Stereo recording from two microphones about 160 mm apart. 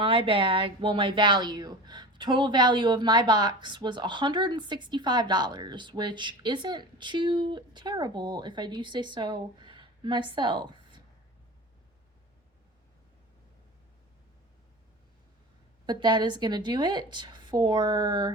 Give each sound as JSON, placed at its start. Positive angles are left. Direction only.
{"t": 0.0, "sound": "speech", "side_deg": -35}
{"t": 15.9, "sound": "speech", "side_deg": -25}